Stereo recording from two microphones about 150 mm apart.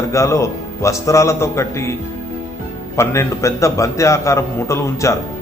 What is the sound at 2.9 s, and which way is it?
A man's voice, 20° left (ahead or behind).